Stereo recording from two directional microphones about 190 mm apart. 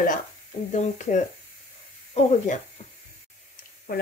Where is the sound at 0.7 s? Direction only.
40° left (ahead or behind).